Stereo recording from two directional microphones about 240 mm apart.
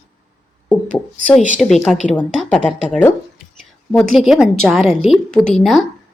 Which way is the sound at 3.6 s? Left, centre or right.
Centre.